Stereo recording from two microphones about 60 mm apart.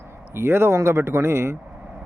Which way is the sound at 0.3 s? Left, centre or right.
Right.